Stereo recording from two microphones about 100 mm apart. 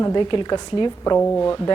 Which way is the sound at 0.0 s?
50° left (ahead or behind).